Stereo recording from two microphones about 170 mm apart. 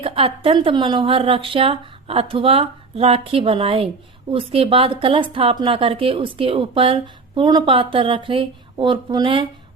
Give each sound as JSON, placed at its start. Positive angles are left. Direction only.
{"t": 0.0, "sound": "a woman's voice", "side_deg": -35}